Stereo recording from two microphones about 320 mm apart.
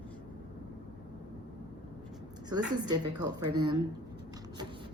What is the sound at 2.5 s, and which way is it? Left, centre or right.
A woman's voice, centre.